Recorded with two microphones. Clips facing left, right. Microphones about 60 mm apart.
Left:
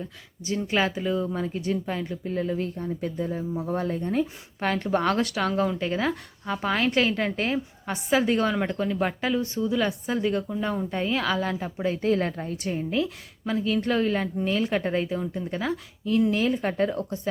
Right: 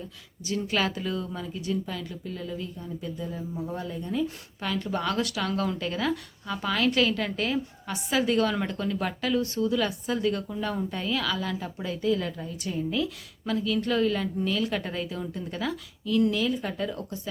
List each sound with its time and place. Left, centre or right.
0.4 s a woman's voice: left
1.4 s a woman's voice: left